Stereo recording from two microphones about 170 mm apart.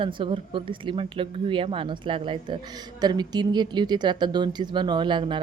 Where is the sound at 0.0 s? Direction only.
30° right (ahead or behind).